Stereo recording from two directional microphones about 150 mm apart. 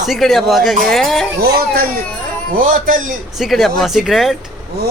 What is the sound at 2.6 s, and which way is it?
Speech, 65° right (ahead or behind).